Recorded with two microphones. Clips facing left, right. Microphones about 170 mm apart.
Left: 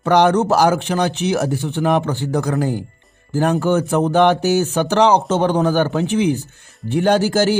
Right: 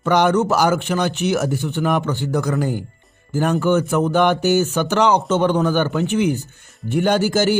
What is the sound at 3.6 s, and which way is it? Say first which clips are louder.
Speech: left 1 dB; 35° left (ahead or behind).